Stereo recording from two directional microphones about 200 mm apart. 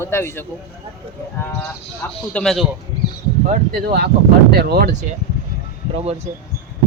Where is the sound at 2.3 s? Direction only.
5° left (ahead or behind).